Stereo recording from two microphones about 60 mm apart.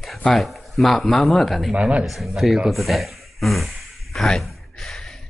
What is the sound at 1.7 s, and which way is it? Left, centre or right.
Speech, centre.